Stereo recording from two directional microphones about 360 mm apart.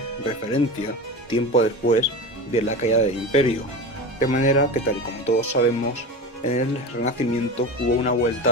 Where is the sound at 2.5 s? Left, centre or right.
Centre.